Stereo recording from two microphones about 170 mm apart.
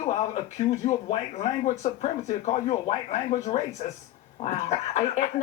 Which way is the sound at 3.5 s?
30° left (ahead or behind).